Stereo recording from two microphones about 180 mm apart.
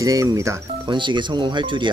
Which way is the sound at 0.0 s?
20° right (ahead or behind).